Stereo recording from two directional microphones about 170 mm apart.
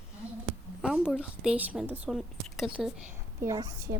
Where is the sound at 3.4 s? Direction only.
20° right (ahead or behind).